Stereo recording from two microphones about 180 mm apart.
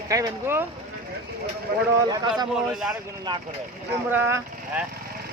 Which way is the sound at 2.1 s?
25° right (ahead or behind).